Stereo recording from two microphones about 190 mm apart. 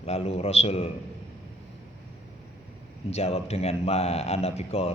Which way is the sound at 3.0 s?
35° left (ahead or behind).